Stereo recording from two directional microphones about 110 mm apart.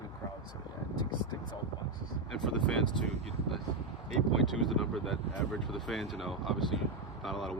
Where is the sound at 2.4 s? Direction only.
5° left (ahead or behind).